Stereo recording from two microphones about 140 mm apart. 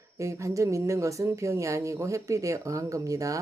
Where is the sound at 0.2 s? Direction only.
20° right (ahead or behind).